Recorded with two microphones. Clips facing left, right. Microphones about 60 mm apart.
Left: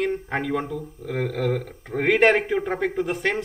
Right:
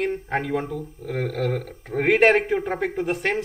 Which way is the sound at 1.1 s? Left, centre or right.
Centre.